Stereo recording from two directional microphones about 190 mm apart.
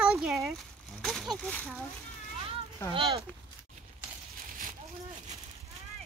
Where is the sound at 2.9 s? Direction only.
30° right (ahead or behind).